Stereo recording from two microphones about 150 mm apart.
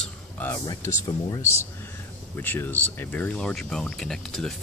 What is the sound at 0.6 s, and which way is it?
Speech, 25° left (ahead or behind).